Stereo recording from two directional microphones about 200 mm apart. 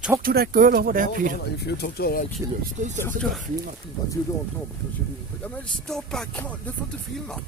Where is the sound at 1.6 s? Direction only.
55° left (ahead or behind).